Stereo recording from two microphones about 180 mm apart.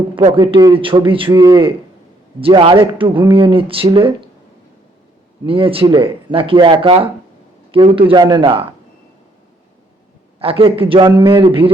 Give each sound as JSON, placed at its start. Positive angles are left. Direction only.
{"t": 0.2, "sound": "speech", "side_deg": -30}
{"t": 5.5, "sound": "speech", "side_deg": -30}
{"t": 10.4, "sound": "speech", "side_deg": -30}